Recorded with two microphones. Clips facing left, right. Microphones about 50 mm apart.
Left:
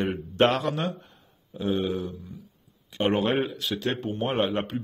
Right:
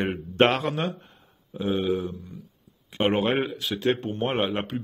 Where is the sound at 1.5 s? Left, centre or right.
Centre.